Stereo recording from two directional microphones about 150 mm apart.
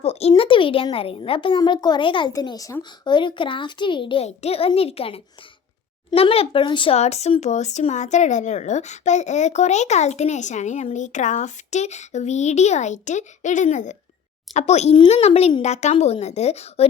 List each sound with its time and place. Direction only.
0.0 s speech: 45° left (ahead or behind)